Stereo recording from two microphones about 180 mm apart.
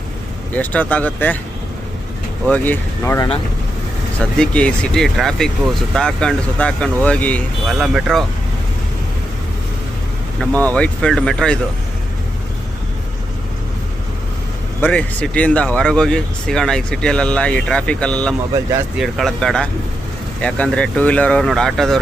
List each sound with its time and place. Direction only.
0.5 s speech: 10° left (ahead or behind)
2.5 s speech: 10° left (ahead or behind)
10.4 s speech: 10° left (ahead or behind)
14.8 s speech: 10° left (ahead or behind)